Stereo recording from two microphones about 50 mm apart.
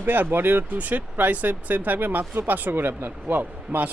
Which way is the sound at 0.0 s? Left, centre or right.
Right.